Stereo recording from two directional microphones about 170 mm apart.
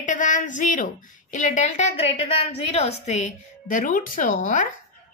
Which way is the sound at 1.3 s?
45° left (ahead or behind).